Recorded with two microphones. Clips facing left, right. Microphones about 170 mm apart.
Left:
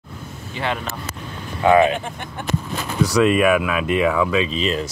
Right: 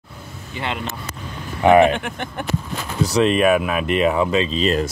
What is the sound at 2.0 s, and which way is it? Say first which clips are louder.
Speech: right 2 dB; 70° right (ahead or behind).